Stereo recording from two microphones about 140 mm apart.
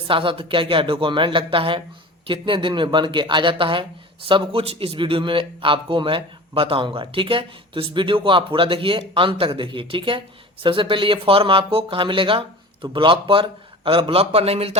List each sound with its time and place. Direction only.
0.1 s a man's voice: 40° right (ahead or behind)